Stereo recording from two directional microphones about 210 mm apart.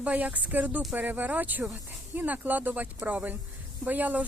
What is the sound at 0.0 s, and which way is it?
Speech, 5° right (ahead or behind).